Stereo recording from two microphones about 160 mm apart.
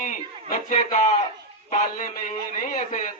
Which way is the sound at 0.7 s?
45° left (ahead or behind).